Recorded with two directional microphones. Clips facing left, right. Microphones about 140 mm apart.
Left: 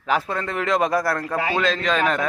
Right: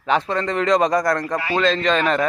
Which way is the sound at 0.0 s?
5° left (ahead or behind).